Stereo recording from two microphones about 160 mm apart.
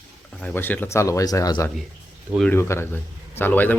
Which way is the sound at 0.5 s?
10° left (ahead or behind).